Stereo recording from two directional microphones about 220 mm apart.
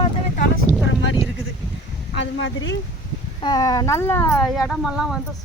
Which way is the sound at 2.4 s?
55° left (ahead or behind).